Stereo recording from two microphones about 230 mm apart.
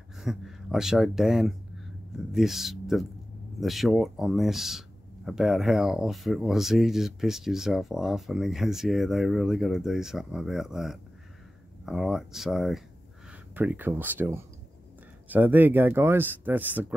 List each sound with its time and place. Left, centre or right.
0.2 s speech: centre